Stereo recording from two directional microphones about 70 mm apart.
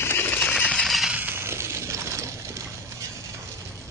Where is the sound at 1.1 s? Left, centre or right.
Right.